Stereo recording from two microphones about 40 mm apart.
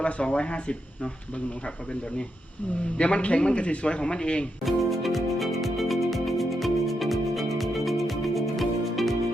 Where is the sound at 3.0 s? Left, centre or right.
Left.